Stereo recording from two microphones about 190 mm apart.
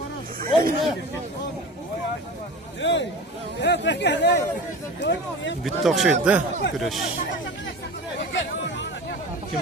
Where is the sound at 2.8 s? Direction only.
70° left (ahead or behind).